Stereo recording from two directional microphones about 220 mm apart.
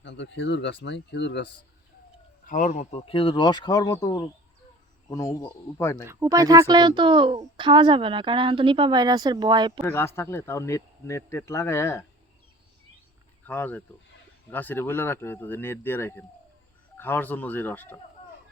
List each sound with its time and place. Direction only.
0.0 s speech: 55° left (ahead or behind)
2.5 s speech: 35° left (ahead or behind); by 6.1 s 15° left (ahead or behind)
6.1 s speech: 15° right (ahead or behind)
9.8 s speech: 10° left (ahead or behind)
13.5 s speech: 5° left (ahead or behind)